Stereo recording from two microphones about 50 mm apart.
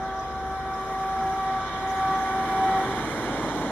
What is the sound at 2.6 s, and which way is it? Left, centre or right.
Vehicle, centre.